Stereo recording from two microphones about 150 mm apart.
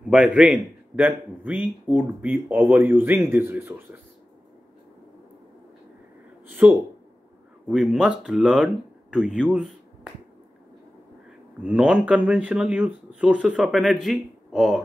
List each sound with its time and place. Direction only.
0.0 s speech: 5° right (ahead or behind)
6.4 s speech: 15° right (ahead or behind)
11.6 s speech: 10° right (ahead or behind)